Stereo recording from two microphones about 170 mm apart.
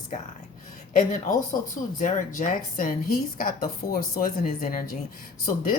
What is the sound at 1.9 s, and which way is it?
A woman's voice, 50° left (ahead or behind).